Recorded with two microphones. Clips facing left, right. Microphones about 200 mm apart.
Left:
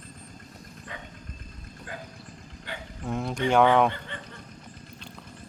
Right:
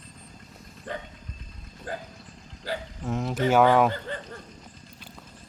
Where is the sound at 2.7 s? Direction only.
35° right (ahead or behind).